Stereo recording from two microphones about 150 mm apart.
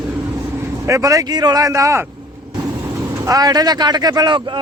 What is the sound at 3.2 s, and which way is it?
Speech, 25° right (ahead or behind).